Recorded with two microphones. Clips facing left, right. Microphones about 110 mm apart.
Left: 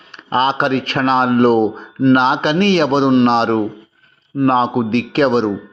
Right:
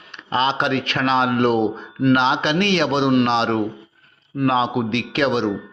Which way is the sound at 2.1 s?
40° left (ahead or behind).